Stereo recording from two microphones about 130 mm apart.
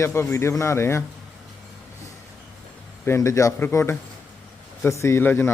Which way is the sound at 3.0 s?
20° left (ahead or behind).